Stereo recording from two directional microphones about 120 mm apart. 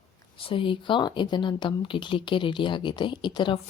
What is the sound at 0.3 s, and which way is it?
Speech, 45° left (ahead or behind).